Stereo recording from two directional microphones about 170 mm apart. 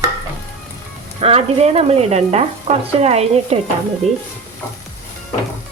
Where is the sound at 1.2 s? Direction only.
35° right (ahead or behind).